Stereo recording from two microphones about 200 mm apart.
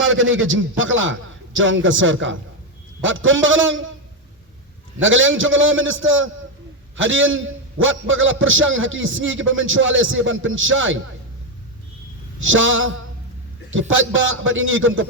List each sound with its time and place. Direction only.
0.0 s a man's voice: 80° right
4.9 s a man's voice: 75° right (ahead or behind)
12.4 s a man's voice: 70° right (ahead or behind)